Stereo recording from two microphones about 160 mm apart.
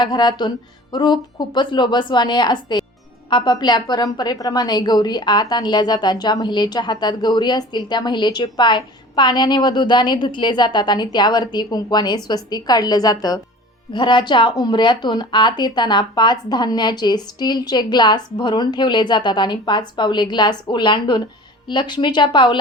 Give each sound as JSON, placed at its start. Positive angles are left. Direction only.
{"t": 0.0, "sound": "a woman's voice", "side_deg": 25}